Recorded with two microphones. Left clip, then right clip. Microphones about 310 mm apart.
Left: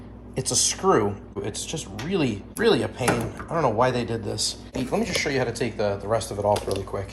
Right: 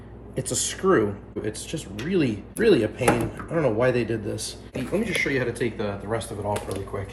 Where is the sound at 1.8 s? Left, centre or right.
Left.